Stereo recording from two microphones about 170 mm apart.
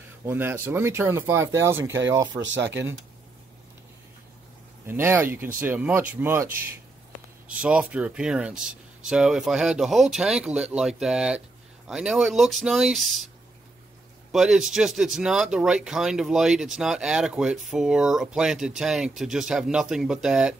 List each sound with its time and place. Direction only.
0.2 s speech: 15° right (ahead or behind)
2.4 s speech: 90° right
4.8 s speech: 15° right (ahead or behind)
14.3 s speech: 5° right (ahead or behind)